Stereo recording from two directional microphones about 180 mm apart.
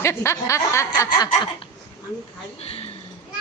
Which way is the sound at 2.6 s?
35° left (ahead or behind).